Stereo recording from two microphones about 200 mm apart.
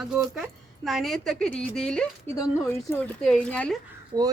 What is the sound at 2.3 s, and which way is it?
Speech, 15° left (ahead or behind).